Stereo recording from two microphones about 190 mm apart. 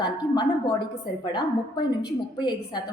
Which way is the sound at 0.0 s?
25° left (ahead or behind).